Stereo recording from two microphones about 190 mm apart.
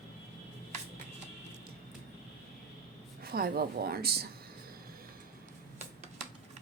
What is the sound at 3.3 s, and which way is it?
A woman's voice, 55° right (ahead or behind).